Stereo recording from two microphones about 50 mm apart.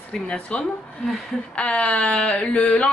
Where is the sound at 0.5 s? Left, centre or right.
Left.